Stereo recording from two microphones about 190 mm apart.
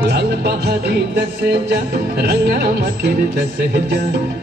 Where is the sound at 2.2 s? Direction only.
55° right (ahead or behind).